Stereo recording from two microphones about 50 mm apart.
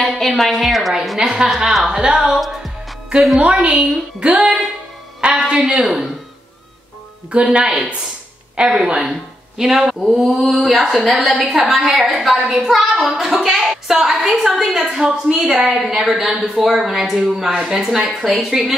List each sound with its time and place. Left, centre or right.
0.2 s a woman's voice: centre
1.9 s a woman's voice: centre
2.3 s music: centre
3.3 s music: right
5.2 s a woman's voice: centre
7.2 s music: right
9.6 s a woman's voice: centre